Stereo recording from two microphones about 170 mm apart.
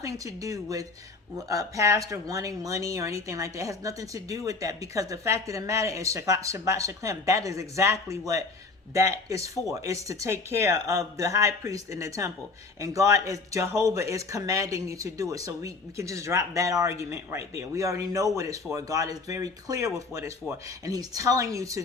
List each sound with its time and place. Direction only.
0.0 s speech: 20° right (ahead or behind)